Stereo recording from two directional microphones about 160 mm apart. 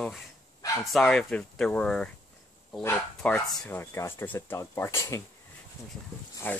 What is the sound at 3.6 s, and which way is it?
Speech, 15° left (ahead or behind).